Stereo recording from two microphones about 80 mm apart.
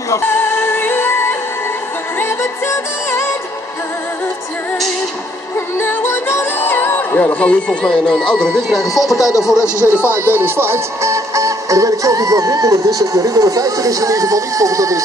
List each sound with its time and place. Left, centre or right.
0.3 s music: left
5.8 s music: left
7.2 s speech: centre
9.6 s speech: left
10.1 s speech: right